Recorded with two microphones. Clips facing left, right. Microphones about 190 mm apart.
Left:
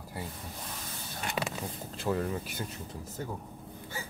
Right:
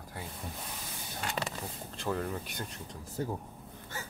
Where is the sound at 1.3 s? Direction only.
5° left (ahead or behind).